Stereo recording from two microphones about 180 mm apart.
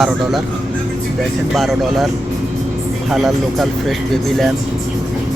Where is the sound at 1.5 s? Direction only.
Centre (ahead or behind).